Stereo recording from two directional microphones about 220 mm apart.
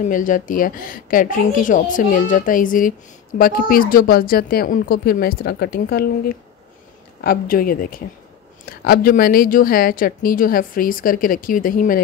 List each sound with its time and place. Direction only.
0.0 s a woman's voice: 35° left (ahead or behind)